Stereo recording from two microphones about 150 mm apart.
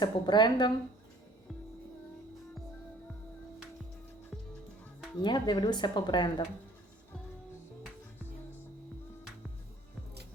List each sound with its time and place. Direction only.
0.0 s speech: 30° left (ahead or behind)
5.2 s speech: 30° left (ahead or behind)